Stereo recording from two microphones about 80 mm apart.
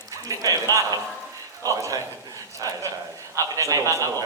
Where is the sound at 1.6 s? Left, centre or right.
Right.